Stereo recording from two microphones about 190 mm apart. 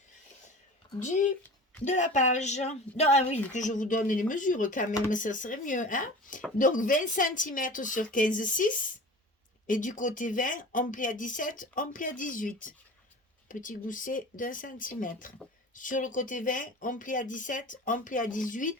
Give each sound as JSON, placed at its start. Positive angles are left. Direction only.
{"t": 0.9, "sound": "a woman's voice", "side_deg": 40}